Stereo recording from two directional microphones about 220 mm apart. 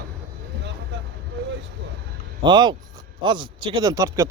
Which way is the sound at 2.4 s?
20° right (ahead or behind).